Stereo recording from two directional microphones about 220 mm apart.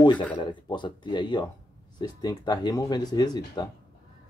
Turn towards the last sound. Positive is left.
turn(degrees=20)  # may be behind; listen again after turning